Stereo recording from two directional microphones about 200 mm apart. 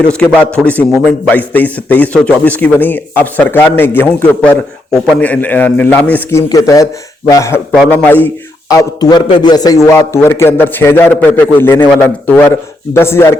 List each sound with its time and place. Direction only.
0.1 s a man's voice: 10° left (ahead or behind)